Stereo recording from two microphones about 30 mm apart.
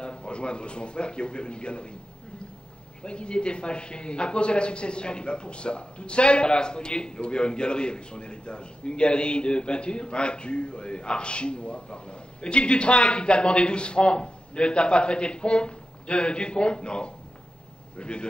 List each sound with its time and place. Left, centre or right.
0.0 s a man's voice: left
3.0 s speech: left